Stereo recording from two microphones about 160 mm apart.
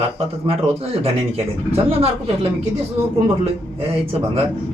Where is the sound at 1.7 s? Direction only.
40° right (ahead or behind).